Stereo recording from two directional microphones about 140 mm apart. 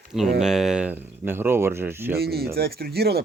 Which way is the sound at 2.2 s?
90° right.